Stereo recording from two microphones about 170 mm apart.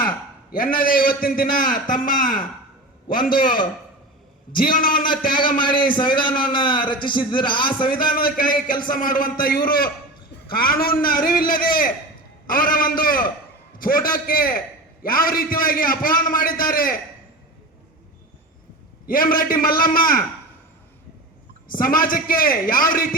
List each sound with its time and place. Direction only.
0.5 s a man's voice: 55° left (ahead or behind)
5.5 s a man's voice: 30° left (ahead or behind)
8.1 s a man's voice: 55° left (ahead or behind)
19.0 s a man's voice: 55° left (ahead or behind)
21.8 s a man's voice: 55° left (ahead or behind)